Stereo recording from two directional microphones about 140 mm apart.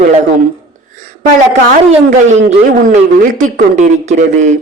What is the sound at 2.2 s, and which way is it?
Speech, 65° right (ahead or behind).